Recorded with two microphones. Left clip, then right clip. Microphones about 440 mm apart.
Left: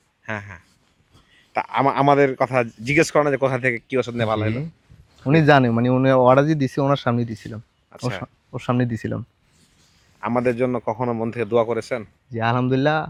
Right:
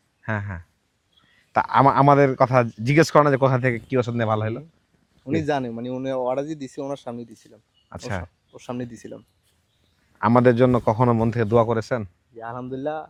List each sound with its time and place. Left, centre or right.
0.3 s speech: right
5.2 s speech: left
7.9 s speech: right
8.5 s speech: left
10.2 s a man's voice: right
12.4 s speech: left